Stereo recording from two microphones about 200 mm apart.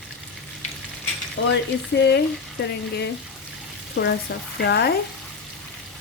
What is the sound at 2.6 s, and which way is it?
Speech, 60° left (ahead or behind).